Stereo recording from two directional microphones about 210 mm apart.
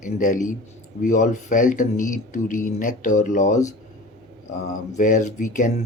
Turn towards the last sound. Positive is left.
turn(degrees=40)  # may be behind; listen again after turning